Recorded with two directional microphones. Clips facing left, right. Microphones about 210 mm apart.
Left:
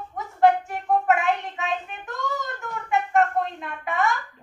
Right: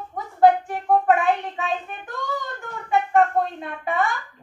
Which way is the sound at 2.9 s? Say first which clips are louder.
Right 3 dB; 30° right (ahead or behind).